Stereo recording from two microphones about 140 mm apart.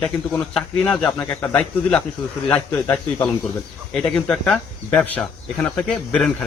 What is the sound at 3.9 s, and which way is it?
A man's voice, 5° left (ahead or behind).